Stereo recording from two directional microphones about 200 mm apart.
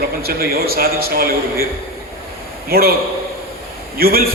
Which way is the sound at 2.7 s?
50° right (ahead or behind).